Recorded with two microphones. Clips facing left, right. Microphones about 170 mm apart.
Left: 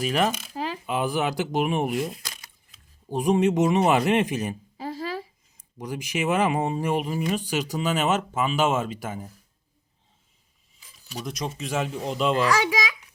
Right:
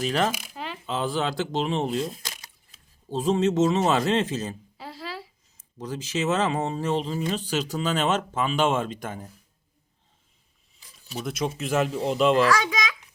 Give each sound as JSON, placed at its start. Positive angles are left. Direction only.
{"t": 0.0, "sound": "speech", "side_deg": 10}
{"t": 0.3, "sound": "speech", "side_deg": -15}
{"t": 0.5, "sound": "coin", "side_deg": 40}
{"t": 0.9, "sound": "speech", "side_deg": 15}
{"t": 4.8, "sound": "a sound", "side_deg": 45}
{"t": 5.7, "sound": "speech", "side_deg": 15}
{"t": 11.1, "sound": "speech", "side_deg": -5}